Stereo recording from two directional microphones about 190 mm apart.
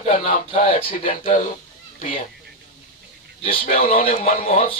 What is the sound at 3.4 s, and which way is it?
Speech, 50° left (ahead or behind).